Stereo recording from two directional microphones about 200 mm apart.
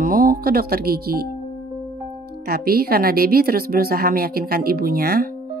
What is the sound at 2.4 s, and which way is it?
Speech, 50° right (ahead or behind).